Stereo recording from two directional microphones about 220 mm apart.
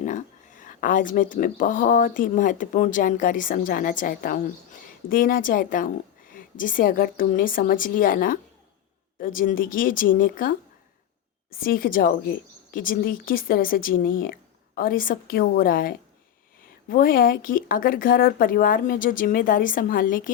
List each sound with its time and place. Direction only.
0.0 s speech: 35° left (ahead or behind)
11.5 s speech: 40° left (ahead or behind)